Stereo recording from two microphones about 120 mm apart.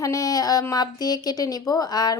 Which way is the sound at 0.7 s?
35° left (ahead or behind).